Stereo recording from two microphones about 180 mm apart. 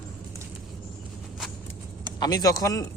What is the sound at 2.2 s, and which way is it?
Speech, 20° left (ahead or behind).